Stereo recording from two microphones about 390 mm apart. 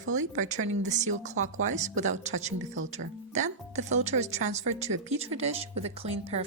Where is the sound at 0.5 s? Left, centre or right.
Right.